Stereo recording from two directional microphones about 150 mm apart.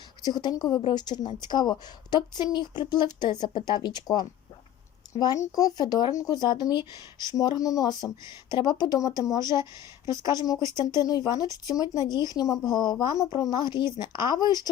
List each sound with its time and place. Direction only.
0.3 s speech: 25° left (ahead or behind)
10.6 s speech: 20° right (ahead or behind)
11.0 s speech: 25° left (ahead or behind)